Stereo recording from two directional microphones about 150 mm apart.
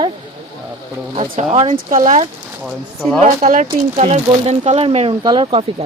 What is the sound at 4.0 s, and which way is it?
Speech, 45° right (ahead or behind).